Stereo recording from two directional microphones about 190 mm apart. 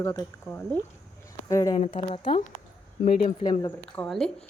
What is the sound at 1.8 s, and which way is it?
A woman's voice, 30° left (ahead or behind).